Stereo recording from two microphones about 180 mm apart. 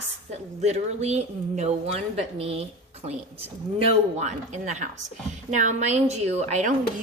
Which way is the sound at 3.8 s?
40° right (ahead or behind).